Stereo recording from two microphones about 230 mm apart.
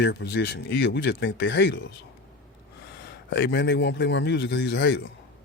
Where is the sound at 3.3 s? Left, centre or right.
Left.